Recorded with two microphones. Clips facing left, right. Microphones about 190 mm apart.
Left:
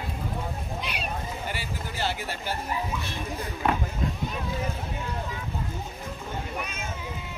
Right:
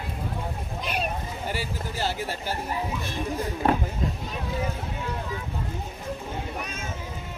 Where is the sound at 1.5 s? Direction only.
40° right (ahead or behind).